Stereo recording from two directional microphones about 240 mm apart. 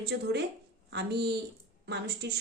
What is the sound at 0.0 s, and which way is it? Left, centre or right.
A woman's voice, right.